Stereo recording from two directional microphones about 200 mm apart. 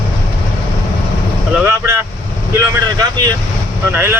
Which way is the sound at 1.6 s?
10° right (ahead or behind).